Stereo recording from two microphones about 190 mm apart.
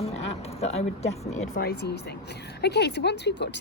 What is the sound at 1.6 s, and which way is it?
A woman's voice, 60° left (ahead or behind).